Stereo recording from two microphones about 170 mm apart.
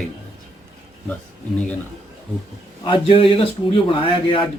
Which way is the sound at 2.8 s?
30° left (ahead or behind).